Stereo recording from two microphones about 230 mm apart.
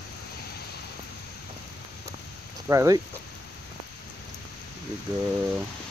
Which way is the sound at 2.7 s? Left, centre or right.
Centre.